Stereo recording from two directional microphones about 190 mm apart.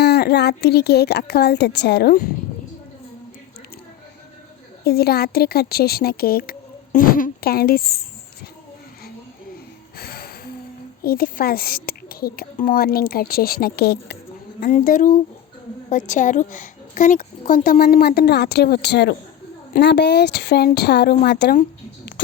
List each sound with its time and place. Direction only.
0.0 s a woman's voice: 60° left (ahead or behind)
4.8 s a woman's voice: 55° left (ahead or behind)
10.0 s music: 55° left (ahead or behind)
11.0 s a woman's voice: 50° left (ahead or behind)
14.6 s a woman's voice: 45° left (ahead or behind)